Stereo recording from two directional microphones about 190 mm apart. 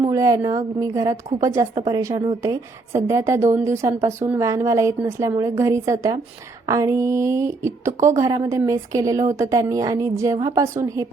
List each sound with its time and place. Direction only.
0.0 s a woman's voice: 20° right (ahead or behind)